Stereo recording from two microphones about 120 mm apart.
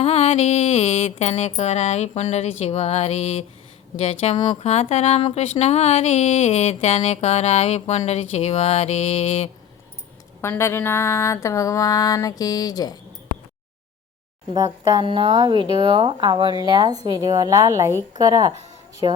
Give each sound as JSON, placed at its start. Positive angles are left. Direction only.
{"t": 0.0, "sound": "speech", "side_deg": 60}
{"t": 10.4, "sound": "mantra", "side_deg": 20}
{"t": 14.5, "sound": "speech", "side_deg": -35}
{"t": 15.4, "sound": "speech", "side_deg": -40}
{"t": 19.0, "sound": "speech", "side_deg": -45}